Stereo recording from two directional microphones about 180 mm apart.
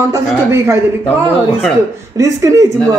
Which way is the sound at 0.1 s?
15° right (ahead or behind).